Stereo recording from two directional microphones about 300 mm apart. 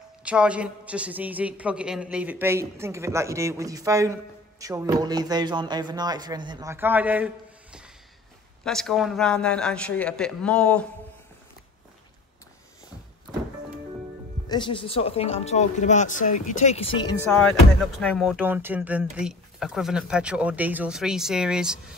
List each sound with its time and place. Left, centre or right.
0.2 s a man's voice: centre
14.5 s speech: centre
18.0 s speech: centre